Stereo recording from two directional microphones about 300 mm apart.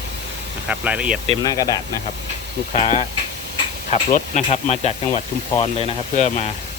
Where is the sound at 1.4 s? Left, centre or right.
Centre.